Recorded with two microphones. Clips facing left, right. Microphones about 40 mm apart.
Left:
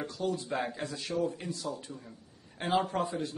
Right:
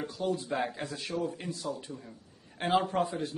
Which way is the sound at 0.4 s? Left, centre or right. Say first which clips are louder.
Right 1 dB; centre.